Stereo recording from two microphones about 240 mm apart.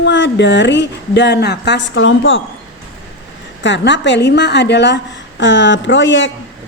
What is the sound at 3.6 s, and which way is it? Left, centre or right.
A woman's voice, left.